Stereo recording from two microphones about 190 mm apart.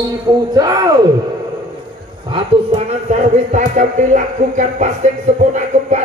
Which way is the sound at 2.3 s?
25° right (ahead or behind).